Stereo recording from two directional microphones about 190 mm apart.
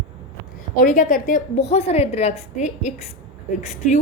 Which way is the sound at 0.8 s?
45° left (ahead or behind).